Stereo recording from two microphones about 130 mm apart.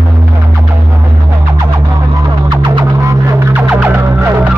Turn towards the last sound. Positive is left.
turn(degrees=-20)  # may be behind; listen again after turning